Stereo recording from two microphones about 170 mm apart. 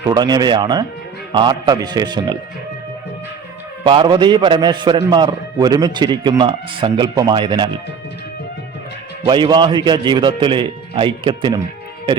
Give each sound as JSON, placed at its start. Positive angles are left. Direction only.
{"t": 0.1, "sound": "a man's voice", "side_deg": -25}
{"t": 3.8, "sound": "a man's voice", "side_deg": -30}
{"t": 9.2, "sound": "a man's voice", "side_deg": -25}